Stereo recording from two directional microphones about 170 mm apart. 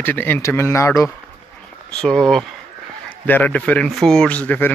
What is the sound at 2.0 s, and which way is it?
A man's voice, 5° left (ahead or behind).